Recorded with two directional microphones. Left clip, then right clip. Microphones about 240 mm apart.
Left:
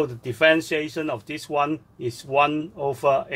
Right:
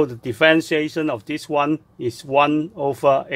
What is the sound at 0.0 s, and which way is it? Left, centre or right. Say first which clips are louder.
Speech: right 3 dB; right.